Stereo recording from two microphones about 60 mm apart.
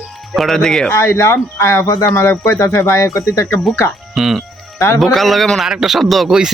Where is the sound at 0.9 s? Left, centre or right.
Left.